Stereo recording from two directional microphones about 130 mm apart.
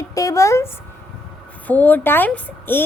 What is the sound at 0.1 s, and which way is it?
Speech, 25° left (ahead or behind).